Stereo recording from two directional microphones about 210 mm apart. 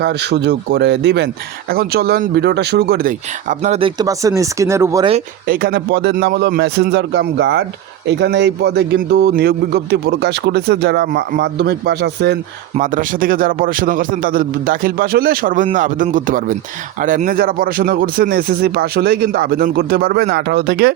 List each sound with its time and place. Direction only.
0.0 s a man's voice: 55° right (ahead or behind); by 5.0 s 15° right (ahead or behind)
5.5 s speech: 45° right (ahead or behind)
12.7 s a man's voice: 40° right (ahead or behind)